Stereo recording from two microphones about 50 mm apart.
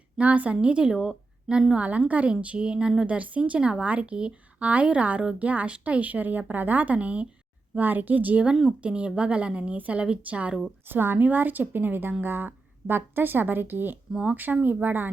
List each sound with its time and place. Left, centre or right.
0.2 s a woman's voice: right
1.7 s a woman's voice: right
3.1 s a woman's voice: right
7.8 s a woman's voice: right
8.8 s a woman's voice: right
10.8 s a woman's voice: right